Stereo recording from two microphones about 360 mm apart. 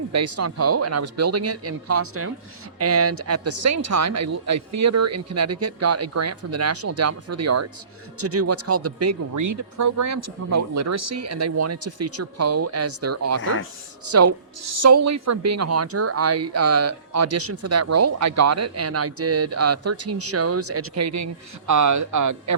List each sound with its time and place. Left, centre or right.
0.1 s speech: right
13.4 s speech: left
14.1 s speech: right